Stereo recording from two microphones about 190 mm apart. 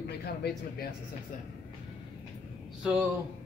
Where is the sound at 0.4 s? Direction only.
55° left (ahead or behind).